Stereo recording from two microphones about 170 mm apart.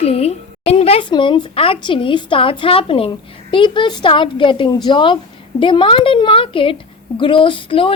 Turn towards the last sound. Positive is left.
turn(degrees=30)  # may be behind; listen again after turning